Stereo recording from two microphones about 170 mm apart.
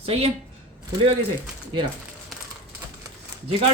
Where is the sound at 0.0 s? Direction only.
35° right (ahead or behind).